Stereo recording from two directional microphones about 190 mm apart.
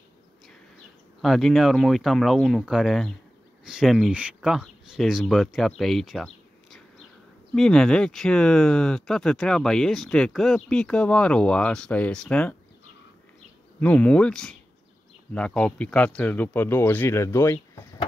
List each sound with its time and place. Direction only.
1.2 s speech: centre (ahead or behind)
13.7 s speech: 10° left (ahead or behind)